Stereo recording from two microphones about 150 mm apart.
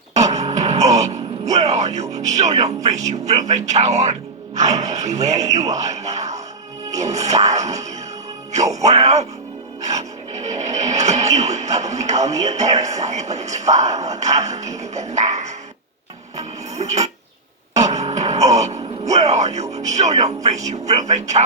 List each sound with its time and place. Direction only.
0.1 s speech: 50° right (ahead or behind)
9.8 s filing: 50° right (ahead or behind)
11.3 s music: 50° right (ahead or behind)
13.0 s speech: 50° right (ahead or behind)
16.4 s music: 50° right (ahead or behind)
19.7 s speech: 50° right (ahead or behind)